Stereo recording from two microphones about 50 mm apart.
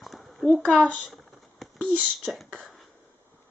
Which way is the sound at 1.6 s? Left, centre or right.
Centre.